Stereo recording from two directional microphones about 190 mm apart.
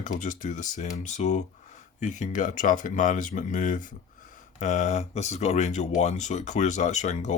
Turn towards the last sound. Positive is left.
turn(degrees=40)  # may be behind; listen again after turning